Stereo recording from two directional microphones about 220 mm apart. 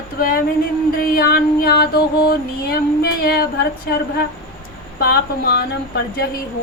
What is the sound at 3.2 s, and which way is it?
Speech, 45° left (ahead or behind).